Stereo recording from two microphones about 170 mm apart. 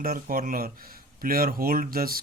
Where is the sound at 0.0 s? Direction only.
60° right (ahead or behind).